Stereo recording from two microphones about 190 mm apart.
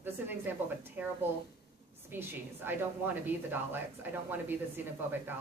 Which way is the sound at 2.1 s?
10° right (ahead or behind).